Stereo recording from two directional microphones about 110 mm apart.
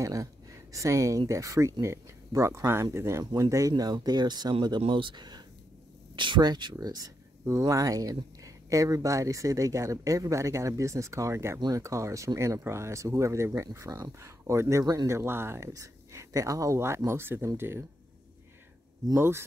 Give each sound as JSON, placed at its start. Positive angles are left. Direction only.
{"t": 0.0, "sound": "speech", "side_deg": -30}
{"t": 19.1, "sound": "speech", "side_deg": -20}